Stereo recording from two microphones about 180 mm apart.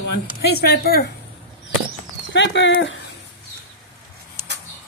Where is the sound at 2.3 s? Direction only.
85° left.